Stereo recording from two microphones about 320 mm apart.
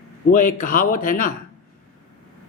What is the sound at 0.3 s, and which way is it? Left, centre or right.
A man's voice, left.